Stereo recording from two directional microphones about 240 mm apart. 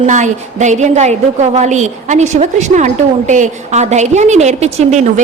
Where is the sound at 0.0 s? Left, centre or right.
Right.